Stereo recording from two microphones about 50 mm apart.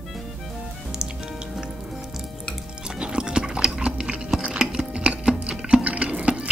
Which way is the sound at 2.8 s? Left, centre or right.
Centre.